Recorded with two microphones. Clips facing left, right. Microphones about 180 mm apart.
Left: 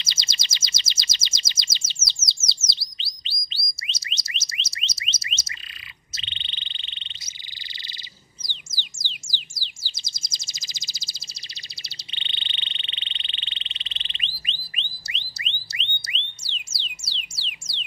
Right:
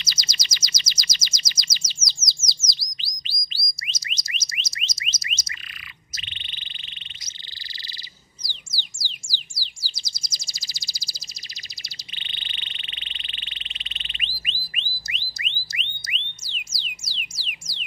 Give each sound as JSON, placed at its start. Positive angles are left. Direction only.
{"t": 0.0, "sound": "bird", "side_deg": 25}
{"t": 2.4, "sound": "chirp", "side_deg": 25}
{"t": 3.3, "sound": "a sound", "side_deg": 25}
{"t": 6.1, "sound": "frog", "side_deg": 25}
{"t": 8.5, "sound": "bird", "side_deg": 20}
{"t": 12.1, "sound": "frog", "side_deg": 25}
{"t": 14.6, "sound": "a sound", "side_deg": 30}
{"t": 15.6, "sound": "theremin", "side_deg": 25}
{"t": 17.4, "sound": "a sound", "side_deg": 25}